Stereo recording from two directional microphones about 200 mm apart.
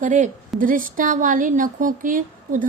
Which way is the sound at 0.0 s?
40° right (ahead or behind).